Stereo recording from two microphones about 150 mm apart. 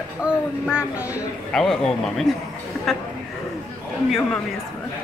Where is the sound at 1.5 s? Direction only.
5° left (ahead or behind).